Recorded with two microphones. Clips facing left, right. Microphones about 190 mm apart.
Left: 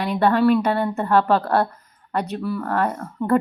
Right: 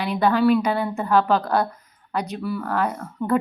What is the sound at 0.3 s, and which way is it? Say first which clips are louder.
Speech: even; centre (ahead or behind).